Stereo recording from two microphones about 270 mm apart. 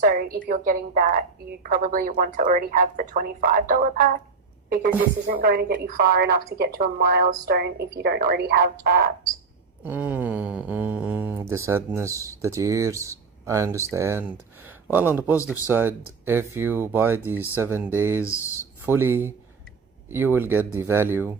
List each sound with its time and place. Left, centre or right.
0.0 s a woman's voice: right
9.8 s speech: centre
18.3 s speech: centre
18.9 s speech: centre